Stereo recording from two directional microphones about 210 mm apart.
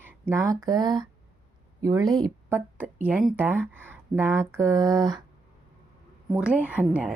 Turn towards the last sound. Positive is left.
turn(degrees=-5)  # may be behind; listen again after turning